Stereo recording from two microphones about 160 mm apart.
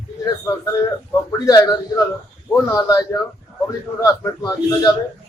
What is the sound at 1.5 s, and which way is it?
Speech, 20° left (ahead or behind).